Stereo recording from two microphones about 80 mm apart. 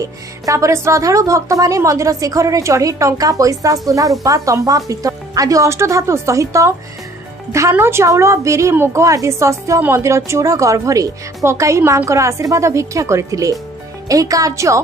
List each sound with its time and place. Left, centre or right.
0.5 s a woman's voice: right
7.8 s a woman's voice: right
9.0 s a woman's voice: right